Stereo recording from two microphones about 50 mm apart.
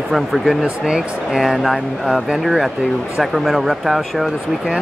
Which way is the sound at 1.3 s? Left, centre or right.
Centre.